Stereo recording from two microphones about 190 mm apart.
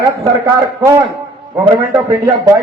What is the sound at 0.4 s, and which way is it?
Speech, 10° right (ahead or behind).